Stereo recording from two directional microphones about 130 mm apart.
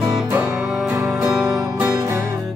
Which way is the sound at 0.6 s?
Centre (ahead or behind).